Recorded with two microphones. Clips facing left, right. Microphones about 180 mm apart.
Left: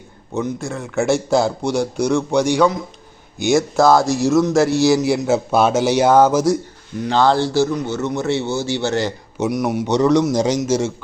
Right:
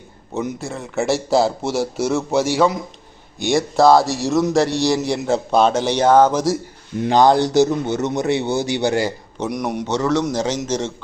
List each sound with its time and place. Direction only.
0.3 s a man's voice: centre (ahead or behind)
7.0 s a man's voice: 15° right (ahead or behind)
9.4 s a man's voice: 5° left (ahead or behind)
9.8 s a man's voice: 15° left (ahead or behind)